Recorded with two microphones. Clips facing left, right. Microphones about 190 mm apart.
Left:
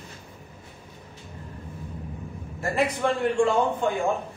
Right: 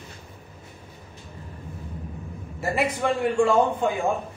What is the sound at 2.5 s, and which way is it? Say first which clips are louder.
Speech: even; 5° right (ahead or behind).